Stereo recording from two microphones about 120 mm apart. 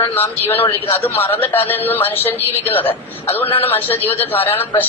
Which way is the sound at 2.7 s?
15° left (ahead or behind).